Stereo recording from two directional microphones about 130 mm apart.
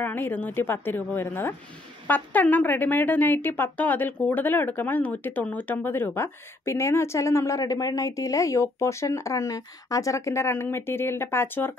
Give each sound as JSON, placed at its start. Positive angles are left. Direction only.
{"t": 0.0, "sound": "a woman's voice", "side_deg": 15}